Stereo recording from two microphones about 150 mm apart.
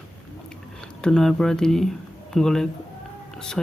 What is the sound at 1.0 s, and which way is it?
Speech, 5° left (ahead or behind).